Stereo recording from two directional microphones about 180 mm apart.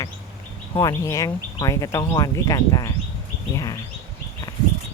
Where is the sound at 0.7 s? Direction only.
20° left (ahead or behind).